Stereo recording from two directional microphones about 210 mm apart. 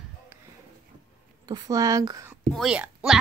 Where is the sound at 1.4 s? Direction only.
20° right (ahead or behind).